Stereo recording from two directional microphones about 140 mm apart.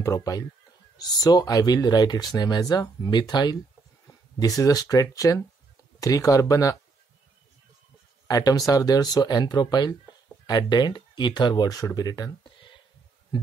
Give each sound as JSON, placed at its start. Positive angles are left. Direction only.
{"t": 0.0, "sound": "speech", "side_deg": 25}
{"t": 8.3, "sound": "speech", "side_deg": 25}